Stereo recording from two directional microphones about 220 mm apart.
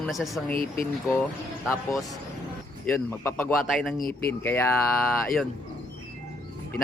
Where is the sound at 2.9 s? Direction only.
10° left (ahead or behind).